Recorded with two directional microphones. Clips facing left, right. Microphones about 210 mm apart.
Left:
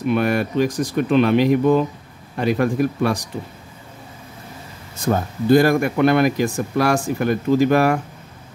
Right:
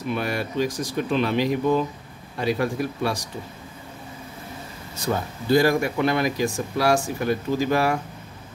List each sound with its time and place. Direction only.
0.1 s speech: 55° left (ahead or behind)
4.9 s speech: 50° left (ahead or behind)